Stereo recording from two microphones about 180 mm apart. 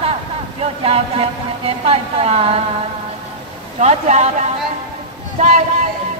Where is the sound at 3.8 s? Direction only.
40° right (ahead or behind).